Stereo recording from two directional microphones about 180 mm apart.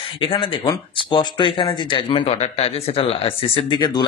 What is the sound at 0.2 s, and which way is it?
A man's voice, 30° left (ahead or behind).